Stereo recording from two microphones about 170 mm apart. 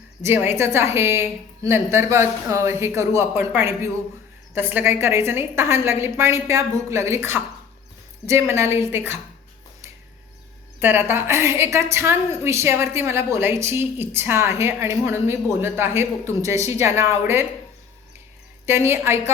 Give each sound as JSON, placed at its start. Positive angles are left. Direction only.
{"t": 0.2, "sound": "a woman's voice", "side_deg": -15}
{"t": 10.8, "sound": "a woman's voice", "side_deg": -15}
{"t": 18.6, "sound": "a woman's voice", "side_deg": -15}